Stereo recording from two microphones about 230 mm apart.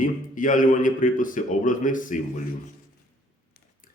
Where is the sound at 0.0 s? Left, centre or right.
Left.